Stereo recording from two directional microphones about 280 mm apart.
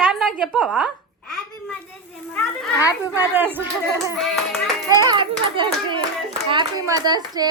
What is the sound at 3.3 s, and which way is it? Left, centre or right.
A woman's voice, centre.